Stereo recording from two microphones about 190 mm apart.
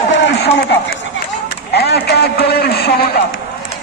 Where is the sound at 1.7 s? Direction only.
60° left (ahead or behind).